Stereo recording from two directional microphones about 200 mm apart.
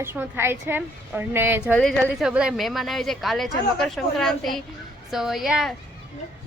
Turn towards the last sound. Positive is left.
turn(degrees=0)  # may be behind; listen again after turning